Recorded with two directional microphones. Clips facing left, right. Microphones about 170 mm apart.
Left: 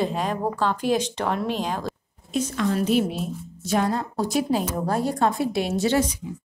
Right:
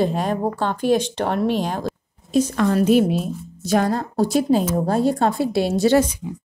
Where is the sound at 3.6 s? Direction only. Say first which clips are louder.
Right 4 dB; 40° right (ahead or behind).